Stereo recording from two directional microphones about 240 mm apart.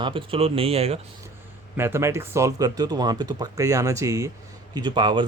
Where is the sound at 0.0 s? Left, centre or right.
Right.